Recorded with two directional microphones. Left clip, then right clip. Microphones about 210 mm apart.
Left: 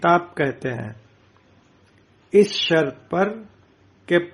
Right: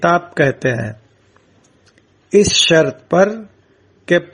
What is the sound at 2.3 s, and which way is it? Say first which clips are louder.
A man's voice: right 5 dB; 35° right (ahead or behind).